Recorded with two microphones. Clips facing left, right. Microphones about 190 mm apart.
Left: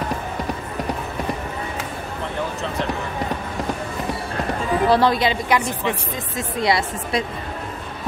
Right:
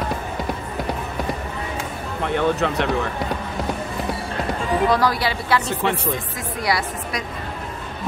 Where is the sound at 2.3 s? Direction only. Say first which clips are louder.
Right 8 dB; 70° right (ahead or behind).